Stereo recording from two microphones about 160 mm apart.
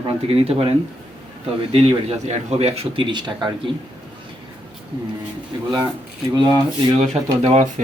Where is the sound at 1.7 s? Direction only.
40° right (ahead or behind).